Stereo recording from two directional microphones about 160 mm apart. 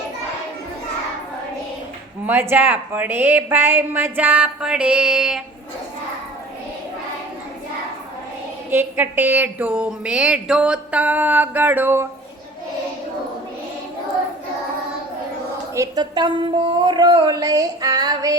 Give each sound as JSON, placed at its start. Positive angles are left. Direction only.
{"t": 2.2, "sound": "a woman's voice", "side_deg": -15}
{"t": 8.7, "sound": "a woman's voice", "side_deg": -15}
{"t": 15.7, "sound": "speech", "side_deg": -20}